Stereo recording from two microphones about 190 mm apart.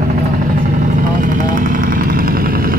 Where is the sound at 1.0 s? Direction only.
45° right (ahead or behind).